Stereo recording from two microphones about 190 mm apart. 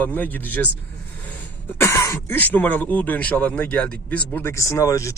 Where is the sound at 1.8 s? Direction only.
15° left (ahead or behind).